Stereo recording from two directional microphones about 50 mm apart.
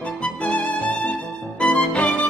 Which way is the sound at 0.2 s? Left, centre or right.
Left.